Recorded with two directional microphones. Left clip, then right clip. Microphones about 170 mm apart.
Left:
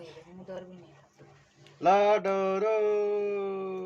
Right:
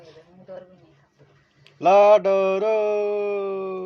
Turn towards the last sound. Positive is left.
turn(degrees=-40)  # may be behind; listen again after turning